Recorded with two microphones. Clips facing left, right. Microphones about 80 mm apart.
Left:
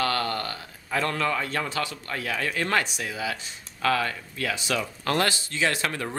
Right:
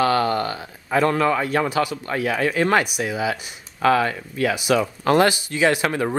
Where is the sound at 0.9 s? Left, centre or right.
Centre.